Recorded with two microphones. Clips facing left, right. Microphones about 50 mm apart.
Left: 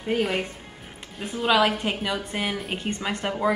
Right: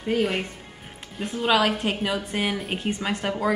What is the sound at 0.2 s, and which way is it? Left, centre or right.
A woman's voice, centre.